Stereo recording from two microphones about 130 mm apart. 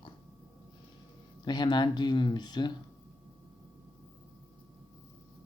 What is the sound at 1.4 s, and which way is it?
Speech, 35° left (ahead or behind).